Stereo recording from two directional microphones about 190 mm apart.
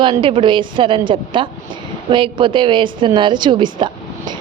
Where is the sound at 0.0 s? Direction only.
25° right (ahead or behind).